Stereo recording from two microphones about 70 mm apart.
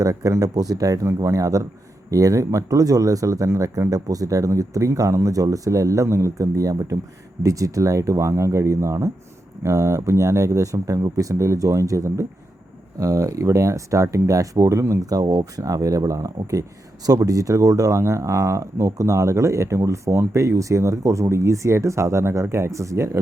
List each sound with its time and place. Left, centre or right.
0.0 s speech: right